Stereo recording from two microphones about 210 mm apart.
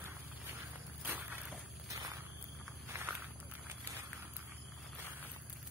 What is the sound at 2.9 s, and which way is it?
Walk, 10° right (ahead or behind).